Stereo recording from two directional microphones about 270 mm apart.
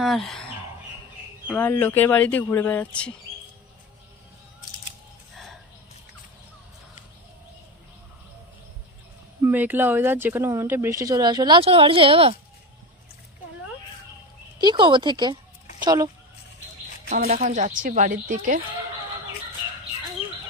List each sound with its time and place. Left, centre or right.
0.0 s speech: centre
1.5 s speech: centre
9.4 s speech: centre
14.6 s speech: centre
17.1 s a woman's voice: right